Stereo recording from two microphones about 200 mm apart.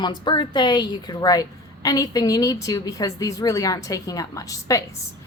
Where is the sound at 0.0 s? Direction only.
20° left (ahead or behind).